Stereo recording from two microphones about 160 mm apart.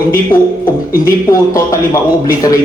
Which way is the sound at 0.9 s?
20° left (ahead or behind).